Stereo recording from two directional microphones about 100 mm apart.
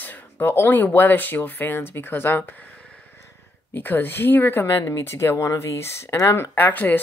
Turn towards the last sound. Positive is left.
turn(degrees=20)  # may be behind; listen again after turning